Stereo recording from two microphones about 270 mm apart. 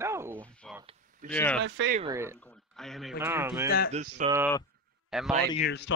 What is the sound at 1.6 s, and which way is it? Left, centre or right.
Speech, right.